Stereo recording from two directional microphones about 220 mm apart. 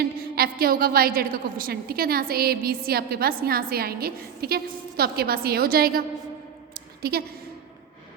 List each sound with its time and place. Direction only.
0.0 s a woman's voice: 45° right (ahead or behind)
7.0 s a woman's voice: 45° right (ahead or behind)